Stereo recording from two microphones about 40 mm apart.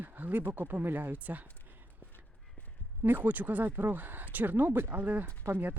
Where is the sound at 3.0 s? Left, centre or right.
Right.